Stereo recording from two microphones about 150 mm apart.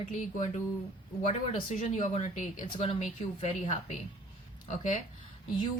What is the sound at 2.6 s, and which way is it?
Speech, 30° left (ahead or behind).